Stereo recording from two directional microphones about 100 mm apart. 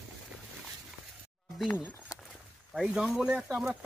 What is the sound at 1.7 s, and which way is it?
Speech, 20° left (ahead or behind).